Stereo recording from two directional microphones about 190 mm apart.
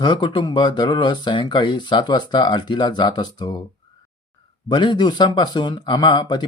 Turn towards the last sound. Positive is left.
turn(degrees=25)  # may be behind; listen again after turning